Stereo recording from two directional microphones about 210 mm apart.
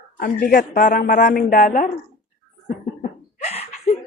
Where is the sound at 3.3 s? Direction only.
30° left (ahead or behind).